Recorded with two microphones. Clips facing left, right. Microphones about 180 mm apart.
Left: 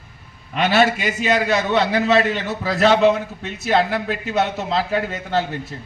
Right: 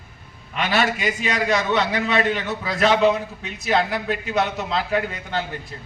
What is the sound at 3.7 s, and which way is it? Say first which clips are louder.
A man's voice: left 2 dB; 35° left (ahead or behind).